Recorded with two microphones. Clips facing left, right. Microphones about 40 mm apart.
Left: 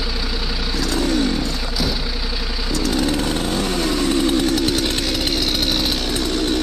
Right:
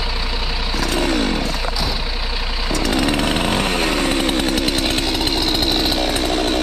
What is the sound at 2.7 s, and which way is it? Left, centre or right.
Chainsaw, right.